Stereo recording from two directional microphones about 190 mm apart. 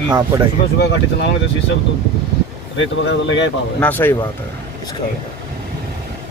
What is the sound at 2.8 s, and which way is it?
Speech, 80° left.